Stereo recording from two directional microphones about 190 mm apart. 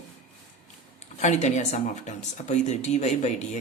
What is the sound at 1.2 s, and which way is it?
Speech, 35° left (ahead or behind).